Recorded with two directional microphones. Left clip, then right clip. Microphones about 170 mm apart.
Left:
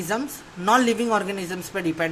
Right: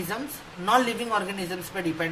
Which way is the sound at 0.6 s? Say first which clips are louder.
Left 3 dB; 50° left (ahead or behind).